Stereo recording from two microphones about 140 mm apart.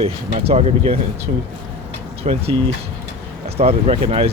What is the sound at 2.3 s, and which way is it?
Speech, 50° right (ahead or behind).